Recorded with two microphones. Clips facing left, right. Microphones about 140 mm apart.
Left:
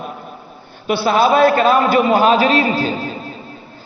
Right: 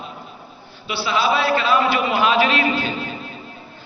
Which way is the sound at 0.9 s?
50° left (ahead or behind).